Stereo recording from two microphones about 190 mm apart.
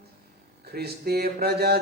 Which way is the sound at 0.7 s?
55° right (ahead or behind).